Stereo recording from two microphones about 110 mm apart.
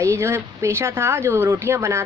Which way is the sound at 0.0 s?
25° right (ahead or behind).